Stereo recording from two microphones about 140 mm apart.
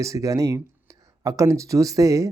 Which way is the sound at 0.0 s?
25° right (ahead or behind).